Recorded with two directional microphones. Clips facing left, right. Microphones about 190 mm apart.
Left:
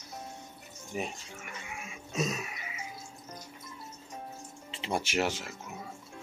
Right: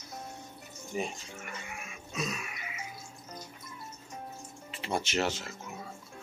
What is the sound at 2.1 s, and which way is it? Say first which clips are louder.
Throat clearing: left 4 dB; 40° left (ahead or behind).